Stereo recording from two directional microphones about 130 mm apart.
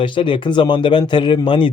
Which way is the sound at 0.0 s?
40° left (ahead or behind).